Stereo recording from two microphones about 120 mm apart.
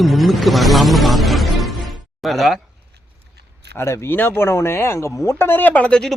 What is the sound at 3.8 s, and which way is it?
Speech, 20° left (ahead or behind).